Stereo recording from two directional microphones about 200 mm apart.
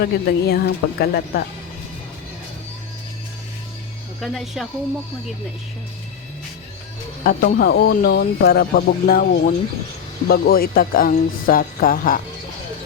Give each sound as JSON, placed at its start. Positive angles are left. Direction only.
{"t": 0.0, "sound": "speech", "side_deg": 55}
{"t": 4.2, "sound": "speech", "side_deg": 0}
{"t": 7.3, "sound": "speech", "side_deg": 50}